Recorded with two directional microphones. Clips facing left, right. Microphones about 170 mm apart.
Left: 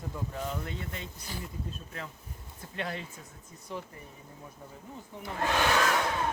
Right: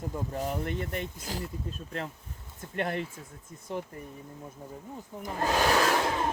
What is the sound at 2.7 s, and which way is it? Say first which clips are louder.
Speech: right 5 dB; 55° right (ahead or behind).